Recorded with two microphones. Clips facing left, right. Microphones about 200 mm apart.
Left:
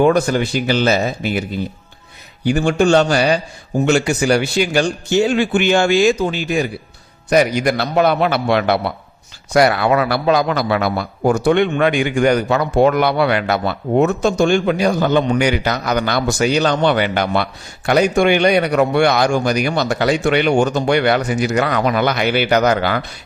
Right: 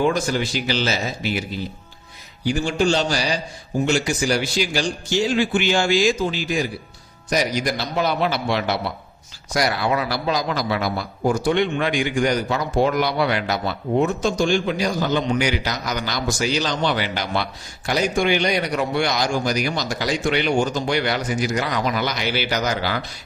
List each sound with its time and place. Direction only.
0.0 s a man's voice: 60° left (ahead or behind)